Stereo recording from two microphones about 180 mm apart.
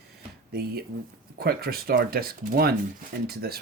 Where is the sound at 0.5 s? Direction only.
60° right (ahead or behind).